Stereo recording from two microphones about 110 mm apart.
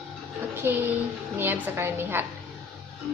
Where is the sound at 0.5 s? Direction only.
20° right (ahead or behind).